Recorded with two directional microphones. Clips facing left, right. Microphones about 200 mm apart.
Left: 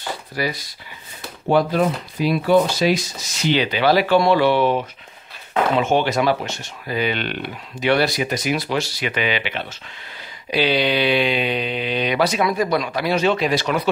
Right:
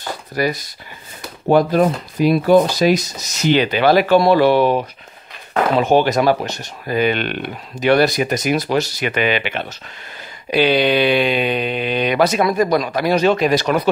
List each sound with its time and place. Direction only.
0.4 s speech: 45° right (ahead or behind)